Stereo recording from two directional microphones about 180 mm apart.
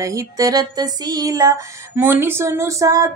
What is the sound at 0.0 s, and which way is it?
Music, 15° right (ahead or behind).